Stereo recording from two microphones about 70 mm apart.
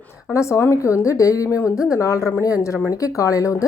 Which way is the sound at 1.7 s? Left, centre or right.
Centre.